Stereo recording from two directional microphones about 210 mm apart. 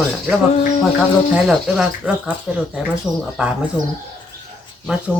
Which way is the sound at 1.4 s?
5° right (ahead or behind).